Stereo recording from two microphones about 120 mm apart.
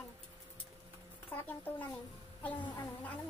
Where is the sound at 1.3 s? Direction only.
15° left (ahead or behind).